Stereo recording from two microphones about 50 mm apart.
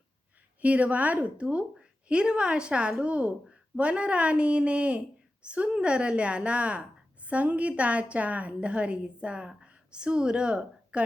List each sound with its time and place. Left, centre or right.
0.6 s a woman's voice: right